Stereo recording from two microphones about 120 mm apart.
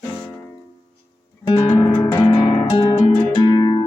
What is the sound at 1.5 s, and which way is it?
Guitar, 30° left (ahead or behind).